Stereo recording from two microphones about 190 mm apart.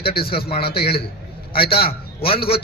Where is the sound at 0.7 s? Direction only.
55° left (ahead or behind).